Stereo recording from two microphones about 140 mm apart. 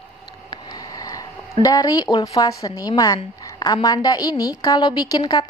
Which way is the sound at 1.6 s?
25° left (ahead or behind).